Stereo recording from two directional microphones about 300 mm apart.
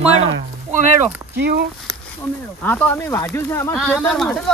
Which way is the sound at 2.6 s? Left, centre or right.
Centre.